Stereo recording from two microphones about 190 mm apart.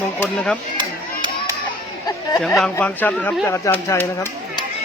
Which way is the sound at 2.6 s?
10° left (ahead or behind).